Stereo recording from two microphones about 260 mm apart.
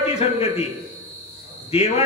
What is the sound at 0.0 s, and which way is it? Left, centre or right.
Speech, left.